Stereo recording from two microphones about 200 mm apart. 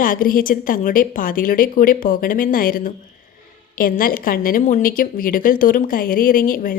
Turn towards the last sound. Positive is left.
turn(degrees=45)  # may be behind; listen again after turning